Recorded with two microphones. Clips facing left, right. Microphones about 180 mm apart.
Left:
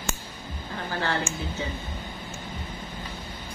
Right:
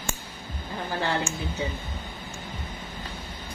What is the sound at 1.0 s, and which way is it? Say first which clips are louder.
Speech: even; 15° right (ahead or behind).